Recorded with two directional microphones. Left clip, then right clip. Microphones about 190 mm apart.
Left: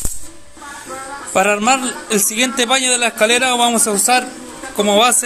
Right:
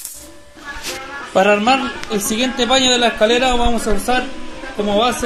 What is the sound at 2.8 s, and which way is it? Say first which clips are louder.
Speech: right 1 dB; 35° left (ahead or behind).